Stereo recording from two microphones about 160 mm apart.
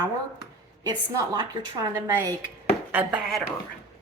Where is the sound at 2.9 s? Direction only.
5° right (ahead or behind).